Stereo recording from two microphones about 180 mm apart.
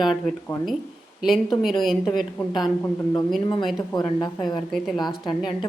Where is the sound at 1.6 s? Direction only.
Centre (ahead or behind).